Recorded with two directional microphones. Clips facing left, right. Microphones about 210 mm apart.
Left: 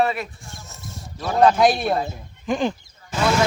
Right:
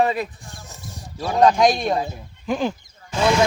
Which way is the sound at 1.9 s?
10° right (ahead or behind).